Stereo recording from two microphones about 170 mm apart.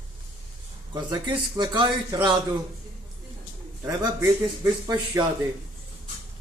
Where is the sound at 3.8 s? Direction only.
15° right (ahead or behind).